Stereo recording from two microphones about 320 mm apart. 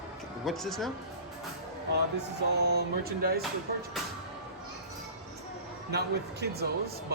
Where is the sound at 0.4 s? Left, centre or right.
Centre.